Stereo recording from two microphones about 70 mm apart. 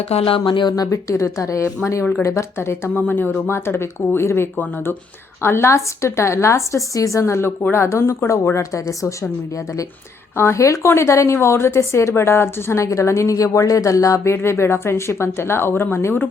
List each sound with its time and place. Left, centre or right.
0.9 s a woman's voice: left
2.9 s a woman's voice: left
10.3 s a woman's voice: left
14.3 s a woman's voice: left